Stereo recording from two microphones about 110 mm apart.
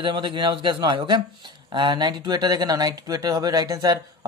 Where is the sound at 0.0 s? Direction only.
40° right (ahead or behind).